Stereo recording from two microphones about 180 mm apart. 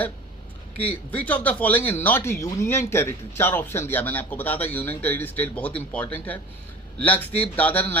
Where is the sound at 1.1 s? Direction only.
10° left (ahead or behind).